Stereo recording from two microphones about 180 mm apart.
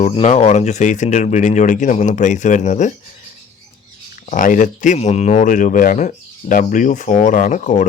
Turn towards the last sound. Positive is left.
turn(degrees=45)  # may be behind; listen again after turning